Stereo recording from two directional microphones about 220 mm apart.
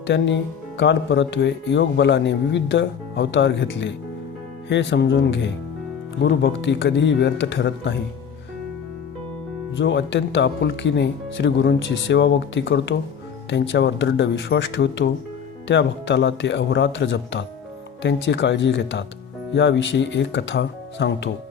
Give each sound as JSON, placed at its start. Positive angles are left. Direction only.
{"t": 0.1, "sound": "a man's voice", "side_deg": 55}
{"t": 9.7, "sound": "a man's voice", "side_deg": 55}